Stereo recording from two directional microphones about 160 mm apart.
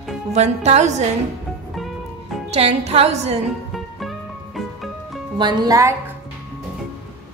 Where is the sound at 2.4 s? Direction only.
40° right (ahead or behind).